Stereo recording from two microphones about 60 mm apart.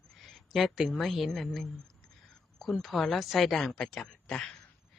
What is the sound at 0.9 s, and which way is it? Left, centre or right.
Speech, centre.